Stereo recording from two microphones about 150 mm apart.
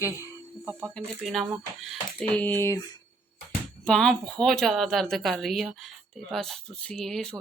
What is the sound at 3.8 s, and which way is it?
A woman's voice, 5° left (ahead or behind).